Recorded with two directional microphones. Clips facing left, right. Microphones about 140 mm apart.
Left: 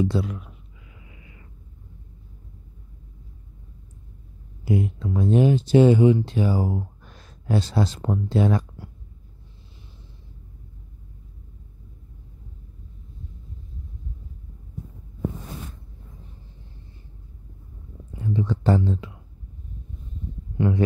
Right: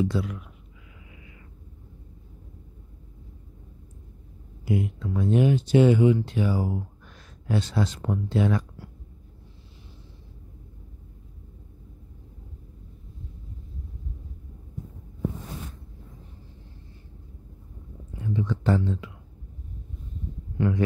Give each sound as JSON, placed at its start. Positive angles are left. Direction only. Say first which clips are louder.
{"t": 0.0, "sound": "speech", "louder": "left 2 dB", "side_deg": 30}
{"t": 4.6, "sound": "speech", "louder": "left 3 dB", "side_deg": 30}
{"t": 18.3, "sound": "speech", "louder": "left 3 dB", "side_deg": 30}
{"t": 20.5, "sound": "speech", "louder": "left 2 dB", "side_deg": 20}